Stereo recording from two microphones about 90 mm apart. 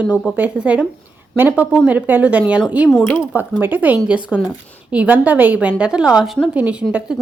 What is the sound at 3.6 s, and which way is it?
A woman's voice, 20° right (ahead or behind).